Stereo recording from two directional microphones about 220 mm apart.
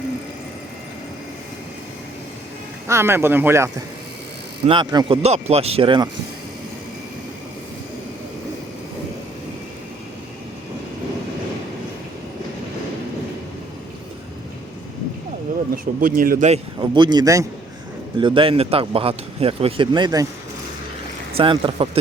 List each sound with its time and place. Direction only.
2.8 s a man's voice: 10° right (ahead or behind)
15.7 s a man's voice: 40° right (ahead or behind); by 20.2 s 20° right (ahead or behind)
21.3 s a man's voice: 25° right (ahead or behind)